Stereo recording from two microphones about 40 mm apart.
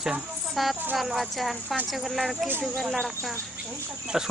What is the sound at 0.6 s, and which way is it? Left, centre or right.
Speech, centre.